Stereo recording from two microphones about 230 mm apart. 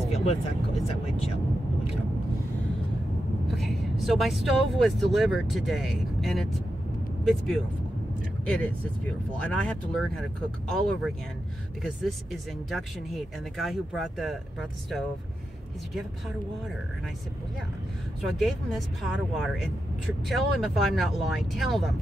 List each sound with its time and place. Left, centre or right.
0.1 s vehicle: left
3.4 s speech: centre
18.2 s speech: centre